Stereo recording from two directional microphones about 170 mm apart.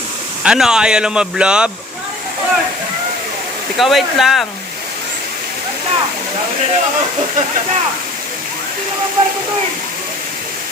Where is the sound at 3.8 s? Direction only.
Centre (ahead or behind).